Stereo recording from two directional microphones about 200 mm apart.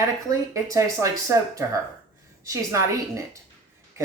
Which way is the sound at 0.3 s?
15° right (ahead or behind).